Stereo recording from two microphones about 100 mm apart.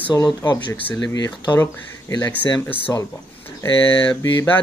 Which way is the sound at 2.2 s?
20° left (ahead or behind).